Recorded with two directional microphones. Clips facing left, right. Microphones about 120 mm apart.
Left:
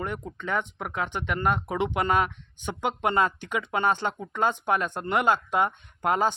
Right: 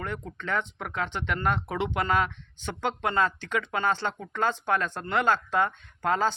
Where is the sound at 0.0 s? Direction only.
15° left (ahead or behind).